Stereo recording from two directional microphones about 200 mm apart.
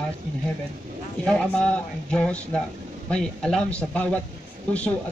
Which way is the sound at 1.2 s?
5° left (ahead or behind).